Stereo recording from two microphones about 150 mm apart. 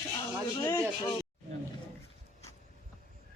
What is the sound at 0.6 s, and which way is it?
Speech, 20° left (ahead or behind).